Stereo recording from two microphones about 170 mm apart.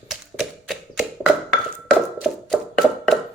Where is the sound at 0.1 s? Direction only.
Centre (ahead or behind).